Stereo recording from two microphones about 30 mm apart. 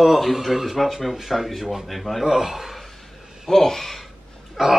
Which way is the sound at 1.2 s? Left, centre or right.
Centre.